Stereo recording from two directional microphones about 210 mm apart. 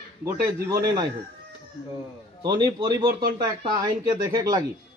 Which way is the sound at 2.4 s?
20° right (ahead or behind).